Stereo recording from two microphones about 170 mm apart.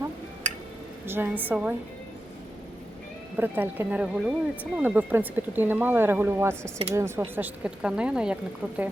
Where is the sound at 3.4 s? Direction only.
10° right (ahead or behind).